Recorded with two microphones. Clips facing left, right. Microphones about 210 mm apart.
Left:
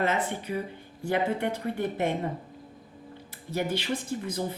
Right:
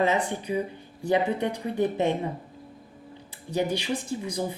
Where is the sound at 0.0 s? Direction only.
15° right (ahead or behind).